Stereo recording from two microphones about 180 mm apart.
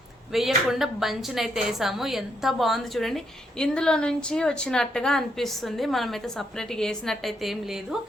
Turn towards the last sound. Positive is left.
turn(degrees=0)  # may be behind; listen again after turning